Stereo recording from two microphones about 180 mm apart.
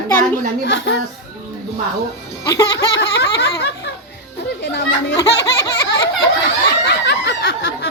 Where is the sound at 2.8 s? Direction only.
70° left (ahead or behind).